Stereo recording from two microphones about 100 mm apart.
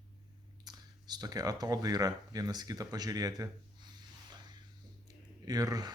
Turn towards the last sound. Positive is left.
turn(degrees=-40)  # may be behind; listen again after turning